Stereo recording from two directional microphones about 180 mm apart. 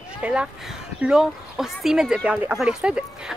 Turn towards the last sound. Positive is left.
turn(degrees=-5)  # may be behind; listen again after turning